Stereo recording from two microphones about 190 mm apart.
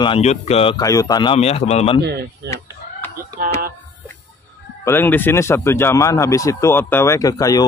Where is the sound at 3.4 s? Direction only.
50° right (ahead or behind).